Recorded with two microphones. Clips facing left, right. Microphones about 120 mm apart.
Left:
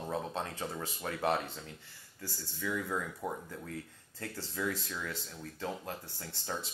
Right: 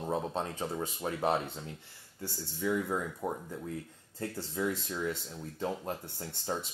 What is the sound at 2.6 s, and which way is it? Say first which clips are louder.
Speech: right 4 dB; 25° right (ahead or behind).